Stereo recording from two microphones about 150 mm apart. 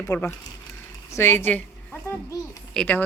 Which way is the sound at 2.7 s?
5° left (ahead or behind).